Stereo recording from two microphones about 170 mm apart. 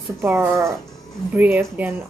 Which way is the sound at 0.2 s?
15° right (ahead or behind).